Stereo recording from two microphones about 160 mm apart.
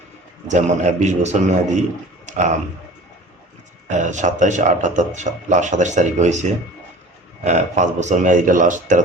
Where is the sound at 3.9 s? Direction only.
50° right (ahead or behind).